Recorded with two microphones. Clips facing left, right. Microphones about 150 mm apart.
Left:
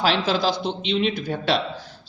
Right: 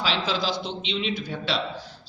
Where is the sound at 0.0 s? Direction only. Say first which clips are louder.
Left 5 dB; 50° left (ahead or behind).